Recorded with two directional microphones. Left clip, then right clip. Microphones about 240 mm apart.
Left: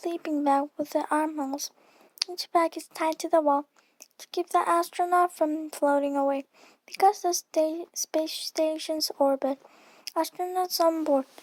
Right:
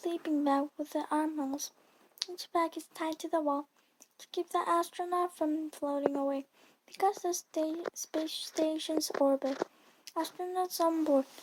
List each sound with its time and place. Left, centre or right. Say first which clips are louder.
0.0 s speech: left 4 dB; left